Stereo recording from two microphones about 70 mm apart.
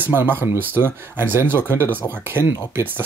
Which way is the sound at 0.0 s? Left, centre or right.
Right.